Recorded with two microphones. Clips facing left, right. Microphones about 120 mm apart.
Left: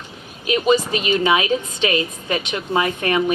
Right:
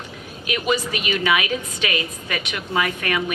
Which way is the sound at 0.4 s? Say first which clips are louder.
Left 6 dB; 25° left (ahead or behind).